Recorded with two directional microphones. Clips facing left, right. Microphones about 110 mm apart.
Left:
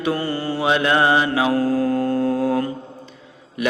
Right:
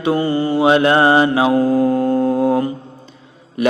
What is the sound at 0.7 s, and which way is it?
Mantra, 35° right (ahead or behind).